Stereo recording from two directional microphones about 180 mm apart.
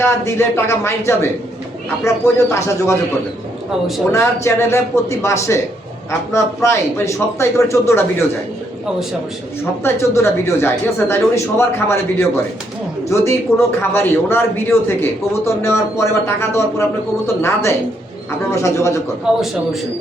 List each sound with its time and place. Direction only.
0.0 s a man's voice: 15° left (ahead or behind)
4.1 s a man's voice: 15° left (ahead or behind)
9.8 s a man's voice: 15° left (ahead or behind)
13.1 s a man's voice: 15° left (ahead or behind)
19.3 s a man's voice: 5° right (ahead or behind)